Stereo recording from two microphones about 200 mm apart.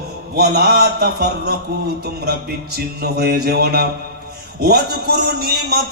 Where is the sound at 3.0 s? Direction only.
50° right (ahead or behind).